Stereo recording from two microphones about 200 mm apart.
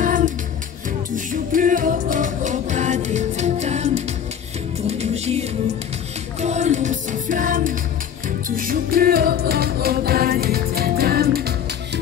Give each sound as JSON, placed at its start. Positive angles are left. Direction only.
{"t": 0.0, "sound": "music", "side_deg": -40}
{"t": 6.4, "sound": "music", "side_deg": -35}